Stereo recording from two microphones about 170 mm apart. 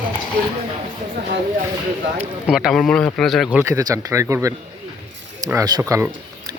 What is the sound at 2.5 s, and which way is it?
Speech, centre (ahead or behind).